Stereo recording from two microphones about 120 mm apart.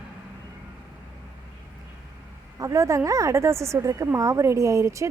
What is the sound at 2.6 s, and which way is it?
A woman's voice, 25° right (ahead or behind).